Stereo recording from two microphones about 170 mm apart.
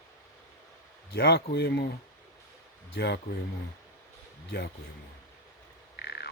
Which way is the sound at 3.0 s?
75° left (ahead or behind).